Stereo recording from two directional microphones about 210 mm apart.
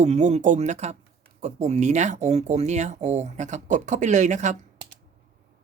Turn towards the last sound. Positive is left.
turn(degrees=-35)  # may be behind; listen again after turning